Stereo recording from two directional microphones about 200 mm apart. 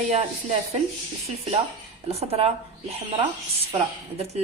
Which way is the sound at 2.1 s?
30° right (ahead or behind).